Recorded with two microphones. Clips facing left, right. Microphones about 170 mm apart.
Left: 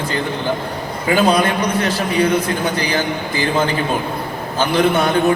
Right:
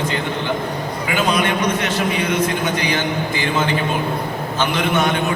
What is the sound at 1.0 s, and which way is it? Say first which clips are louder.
A man's voice: left 5 dB; 35° left (ahead or behind).